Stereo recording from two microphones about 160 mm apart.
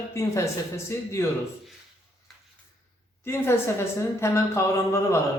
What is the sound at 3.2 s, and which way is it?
A man's voice, 15° left (ahead or behind).